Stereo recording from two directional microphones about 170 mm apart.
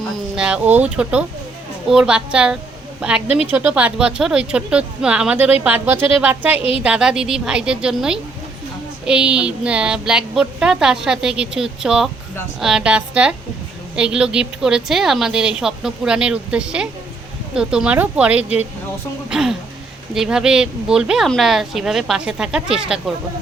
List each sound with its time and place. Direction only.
0.3 s a woman's voice: 5° right (ahead or behind)
6.6 s a woman's voice: 35° left (ahead or behind)
6.8 s a woman's voice: 5° right (ahead or behind)